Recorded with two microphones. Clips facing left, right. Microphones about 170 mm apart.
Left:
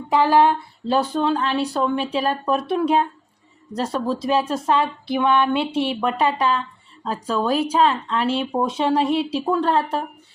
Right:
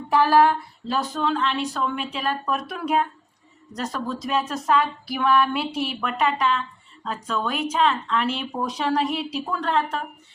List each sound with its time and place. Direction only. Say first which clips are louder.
0.1 s speech: left 1 dB; 20° left (ahead or behind)